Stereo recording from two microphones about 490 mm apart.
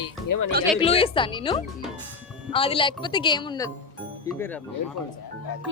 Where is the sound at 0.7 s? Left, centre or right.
Centre.